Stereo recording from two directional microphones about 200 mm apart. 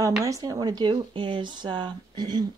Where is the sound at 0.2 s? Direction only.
15° right (ahead or behind).